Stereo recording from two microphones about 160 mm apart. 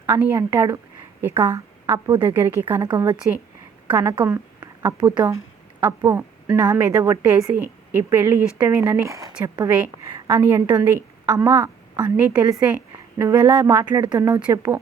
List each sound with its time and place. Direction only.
0.0 s a woman's voice: 15° right (ahead or behind)
2.8 s speech: 30° right (ahead or behind)
4.3 s a woman's voice: 20° right (ahead or behind)
14.3 s a woman's voice: 10° right (ahead or behind)